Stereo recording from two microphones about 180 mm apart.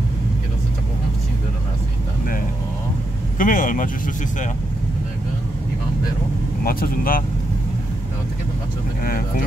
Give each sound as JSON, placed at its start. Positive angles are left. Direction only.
{"t": 3.3, "sound": "speech", "side_deg": 50}
{"t": 6.6, "sound": "speech", "side_deg": 55}